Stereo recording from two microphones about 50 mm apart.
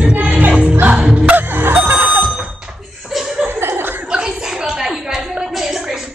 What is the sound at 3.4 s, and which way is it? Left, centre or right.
Chuckle, right.